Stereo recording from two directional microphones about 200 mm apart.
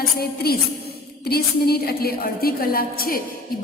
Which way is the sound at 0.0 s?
50° left (ahead or behind).